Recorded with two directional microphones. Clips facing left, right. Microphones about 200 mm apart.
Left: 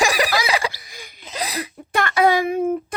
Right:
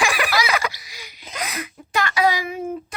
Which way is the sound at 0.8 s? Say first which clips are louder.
Left 2 dB; 50° left (ahead or behind).